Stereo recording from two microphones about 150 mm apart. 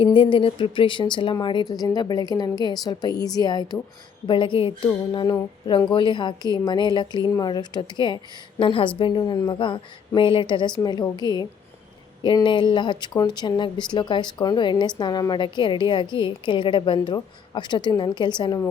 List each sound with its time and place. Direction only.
0.0 s speech: 35° left (ahead or behind)